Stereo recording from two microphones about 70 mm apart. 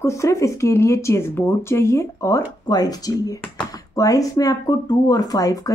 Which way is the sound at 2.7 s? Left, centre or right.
Left.